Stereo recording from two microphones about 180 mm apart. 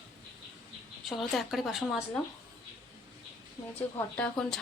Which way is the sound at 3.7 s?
10° left (ahead or behind).